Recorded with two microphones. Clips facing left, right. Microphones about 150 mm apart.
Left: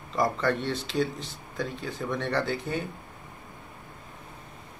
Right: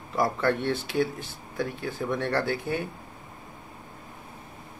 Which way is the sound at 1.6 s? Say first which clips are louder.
Right 2 dB; 5° right (ahead or behind).